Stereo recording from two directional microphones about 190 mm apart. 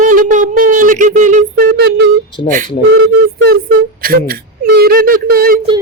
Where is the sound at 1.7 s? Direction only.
65° right (ahead or behind).